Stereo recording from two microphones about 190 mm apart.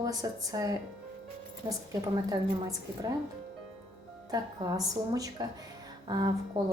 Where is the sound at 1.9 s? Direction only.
20° right (ahead or behind).